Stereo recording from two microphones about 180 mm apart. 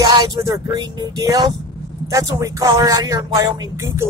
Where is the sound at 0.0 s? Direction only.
20° right (ahead or behind).